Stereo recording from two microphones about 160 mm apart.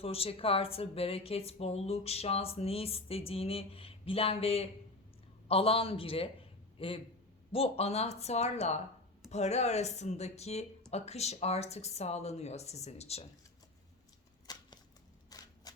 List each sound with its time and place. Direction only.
0.0 s a man's voice: 35° left (ahead or behind)
14.4 s a sound: 25° left (ahead or behind)
15.7 s typewriter: 25° left (ahead or behind)